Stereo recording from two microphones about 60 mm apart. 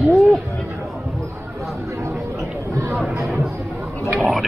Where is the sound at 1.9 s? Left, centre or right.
Right.